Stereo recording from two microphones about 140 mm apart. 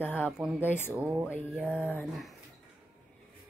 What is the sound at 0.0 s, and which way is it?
Speech, 15° left (ahead or behind).